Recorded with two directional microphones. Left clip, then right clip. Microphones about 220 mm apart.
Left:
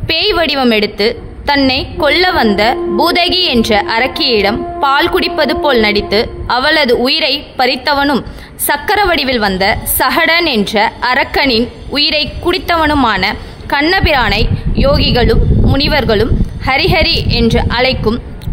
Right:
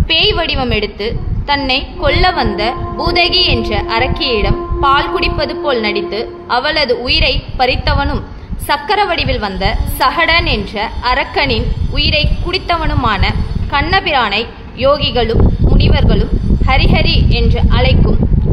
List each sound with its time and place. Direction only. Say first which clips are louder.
0.1 s a woman's voice: left 1 dB; 50° left (ahead or behind)